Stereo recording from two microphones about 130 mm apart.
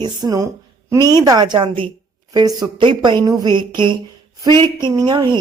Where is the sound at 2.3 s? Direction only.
30° right (ahead or behind).